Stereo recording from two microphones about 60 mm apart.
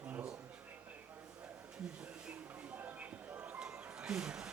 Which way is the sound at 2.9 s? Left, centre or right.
Right.